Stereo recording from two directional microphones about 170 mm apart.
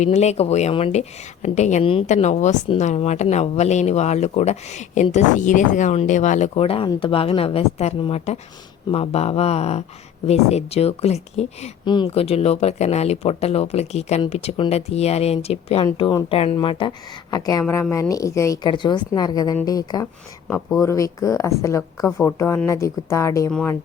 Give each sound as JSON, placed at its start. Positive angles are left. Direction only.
{"t": 0.0, "sound": "a woman's voice", "side_deg": 40}
{"t": 23.5, "sound": "speech", "side_deg": 5}